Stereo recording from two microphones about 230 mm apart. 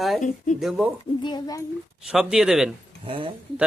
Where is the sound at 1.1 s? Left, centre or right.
Centre.